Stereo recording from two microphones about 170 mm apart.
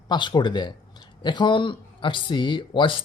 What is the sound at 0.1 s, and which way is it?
Speech, 25° left (ahead or behind).